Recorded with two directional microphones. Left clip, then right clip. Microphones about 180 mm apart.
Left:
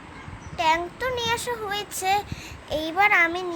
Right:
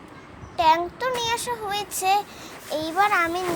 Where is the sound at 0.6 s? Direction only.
10° right (ahead or behind).